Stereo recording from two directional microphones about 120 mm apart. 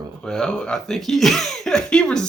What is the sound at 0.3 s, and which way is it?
Speech, 5° left (ahead or behind).